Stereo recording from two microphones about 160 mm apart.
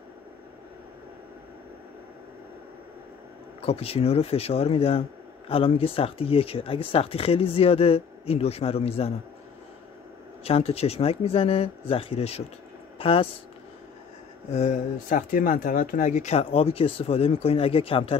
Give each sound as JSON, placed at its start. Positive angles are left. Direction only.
{"t": 3.6, "sound": "speech", "side_deg": 35}
{"t": 10.4, "sound": "speech", "side_deg": 40}
{"t": 14.5, "sound": "speech", "side_deg": 45}